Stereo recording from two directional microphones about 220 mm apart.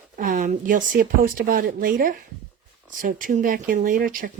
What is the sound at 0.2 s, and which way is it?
A woman's voice, 35° right (ahead or behind).